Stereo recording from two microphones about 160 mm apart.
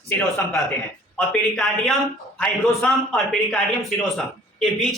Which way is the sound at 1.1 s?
Centre (ahead or behind).